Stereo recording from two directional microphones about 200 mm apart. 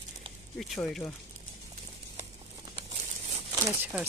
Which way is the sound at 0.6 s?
Centre (ahead or behind).